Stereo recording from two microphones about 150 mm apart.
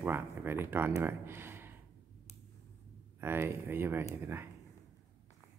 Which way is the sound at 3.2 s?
15° right (ahead or behind).